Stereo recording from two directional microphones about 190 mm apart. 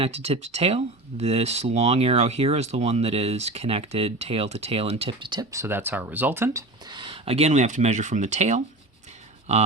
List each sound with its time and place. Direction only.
0.0 s speech: 35° right (ahead or behind)